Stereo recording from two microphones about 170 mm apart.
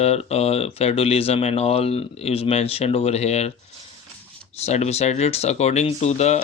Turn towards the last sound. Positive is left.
turn(degrees=40)  # may be behind; listen again after turning